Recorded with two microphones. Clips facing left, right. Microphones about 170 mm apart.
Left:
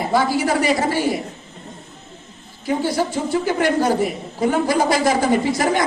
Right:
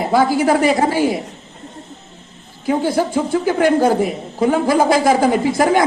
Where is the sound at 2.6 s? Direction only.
50° right (ahead or behind).